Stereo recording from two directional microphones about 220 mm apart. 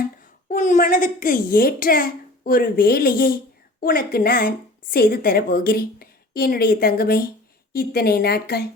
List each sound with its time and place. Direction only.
0.0 s a woman's voice: 35° left (ahead or behind)